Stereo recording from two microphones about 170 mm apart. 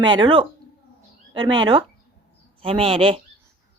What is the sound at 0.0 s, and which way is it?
Speech, 25° right (ahead or behind).